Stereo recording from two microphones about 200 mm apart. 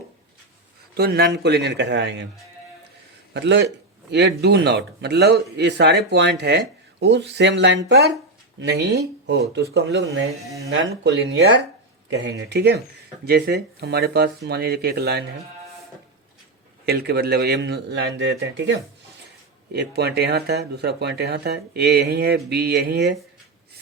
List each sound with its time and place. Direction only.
0.9 s speech: 50° right (ahead or behind)
3.3 s speech: 60° right (ahead or behind)
10.7 s speech: 60° right (ahead or behind)
16.8 s speech: 50° right (ahead or behind)